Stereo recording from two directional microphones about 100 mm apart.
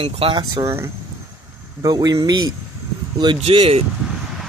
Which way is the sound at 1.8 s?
40° right (ahead or behind).